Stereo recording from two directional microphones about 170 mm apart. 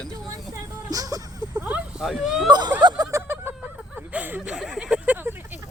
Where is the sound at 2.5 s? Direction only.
25° right (ahead or behind).